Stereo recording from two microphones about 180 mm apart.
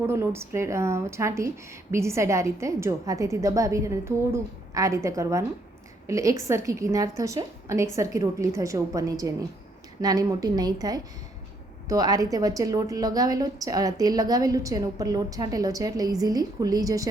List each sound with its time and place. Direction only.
0.0 s a woman's voice: 15° right (ahead or behind)